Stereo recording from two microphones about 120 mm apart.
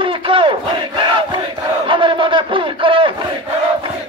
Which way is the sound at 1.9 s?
45° right (ahead or behind).